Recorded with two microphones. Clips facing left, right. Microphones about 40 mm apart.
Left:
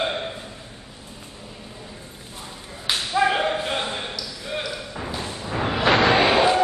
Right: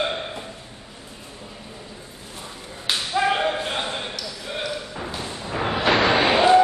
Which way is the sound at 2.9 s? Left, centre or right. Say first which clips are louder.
Left 1 dB; centre.